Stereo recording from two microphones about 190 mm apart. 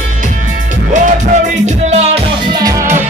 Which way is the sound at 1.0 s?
40° right (ahead or behind).